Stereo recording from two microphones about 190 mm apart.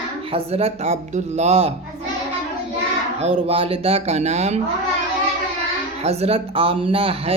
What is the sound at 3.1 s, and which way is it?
Speech, 35° right (ahead or behind).